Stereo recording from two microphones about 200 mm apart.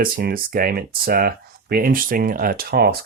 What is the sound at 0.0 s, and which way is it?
Speech, 45° right (ahead or behind).